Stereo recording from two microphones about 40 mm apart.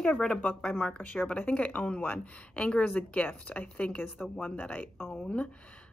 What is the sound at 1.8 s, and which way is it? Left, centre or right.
Speech, left.